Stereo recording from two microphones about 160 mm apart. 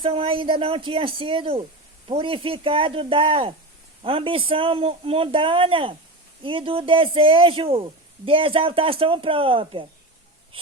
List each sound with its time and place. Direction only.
0.0 s a man's voice: 35° right (ahead or behind)